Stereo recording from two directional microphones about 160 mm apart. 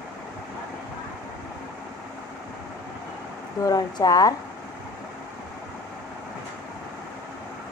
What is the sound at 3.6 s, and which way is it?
Speech, 20° left (ahead or behind).